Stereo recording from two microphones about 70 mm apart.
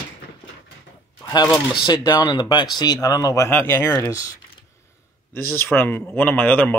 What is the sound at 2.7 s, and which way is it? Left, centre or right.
Speech, left.